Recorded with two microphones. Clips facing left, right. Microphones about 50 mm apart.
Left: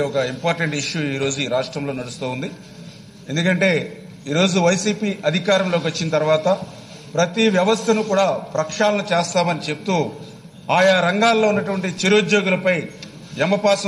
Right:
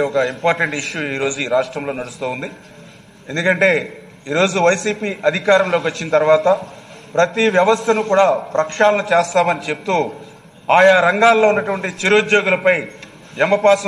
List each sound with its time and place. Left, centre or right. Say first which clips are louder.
0.2 s a man's voice: right 4 dB; centre
1.1 s a man's voice: right 4 dB; right
1.5 s a man's voice: right 4 dB; centre
3.6 s a man's voice: right 3 dB; centre